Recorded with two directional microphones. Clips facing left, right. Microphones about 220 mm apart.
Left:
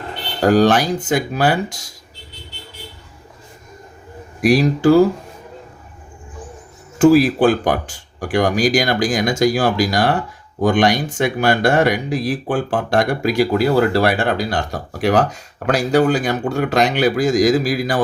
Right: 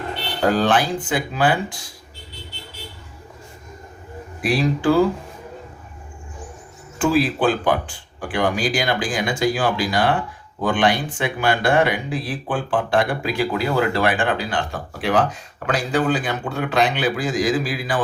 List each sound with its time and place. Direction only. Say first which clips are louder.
0.4 s speech: left 5 dB; 40° left (ahead or behind)
4.4 s speech: left 6 dB; 40° left (ahead or behind)
7.0 s speech: left 7 dB; 45° left (ahead or behind)